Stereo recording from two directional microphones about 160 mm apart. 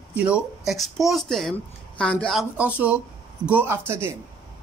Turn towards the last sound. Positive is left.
turn(degrees=-15)  # may be behind; listen again after turning